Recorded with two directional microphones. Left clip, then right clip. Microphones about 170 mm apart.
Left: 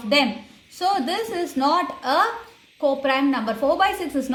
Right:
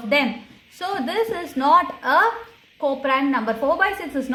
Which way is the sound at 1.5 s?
25° right (ahead or behind).